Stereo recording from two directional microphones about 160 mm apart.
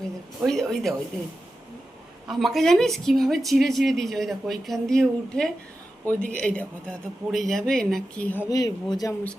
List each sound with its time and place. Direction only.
0.4 s a woman's voice: centre (ahead or behind)
2.2 s a woman's voice: centre (ahead or behind)
8.4 s speech: 25° left (ahead or behind)